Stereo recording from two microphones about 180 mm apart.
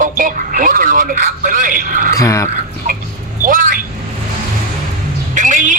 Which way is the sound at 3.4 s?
50° right (ahead or behind).